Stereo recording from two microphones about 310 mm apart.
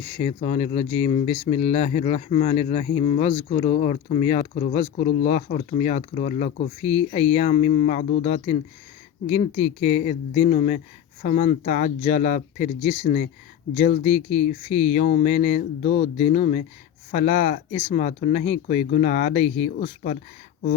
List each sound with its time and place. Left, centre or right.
0.2 s speech: left